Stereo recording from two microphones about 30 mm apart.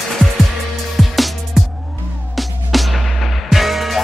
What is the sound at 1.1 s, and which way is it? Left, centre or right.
Music, centre.